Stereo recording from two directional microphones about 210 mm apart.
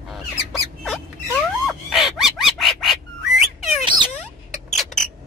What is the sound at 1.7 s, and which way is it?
Bird, centre (ahead or behind).